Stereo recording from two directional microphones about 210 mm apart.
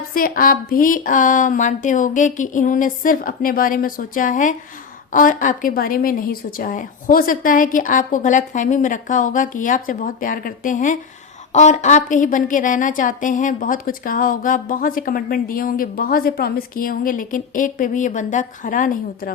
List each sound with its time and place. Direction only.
0.1 s a woman's voice: 40° left (ahead or behind)